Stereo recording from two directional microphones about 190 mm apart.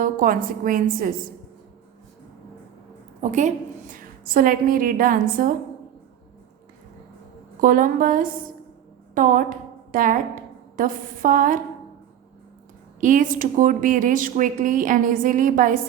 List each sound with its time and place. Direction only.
0.0 s speech: 45° right (ahead or behind)
3.2 s a woman's voice: 40° right (ahead or behind)
7.6 s a woman's voice: 45° right (ahead or behind)
13.0 s speech: 45° right (ahead or behind)